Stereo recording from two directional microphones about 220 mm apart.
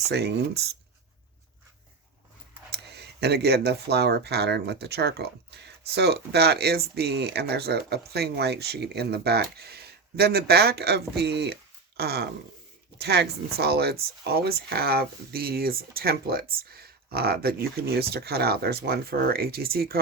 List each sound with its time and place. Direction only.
0.1 s speech: 50° right (ahead or behind)
2.7 s speech: 50° right (ahead or behind)